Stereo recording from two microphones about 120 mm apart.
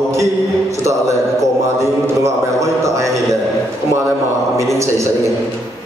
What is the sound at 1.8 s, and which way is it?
Mantra, 25° right (ahead or behind).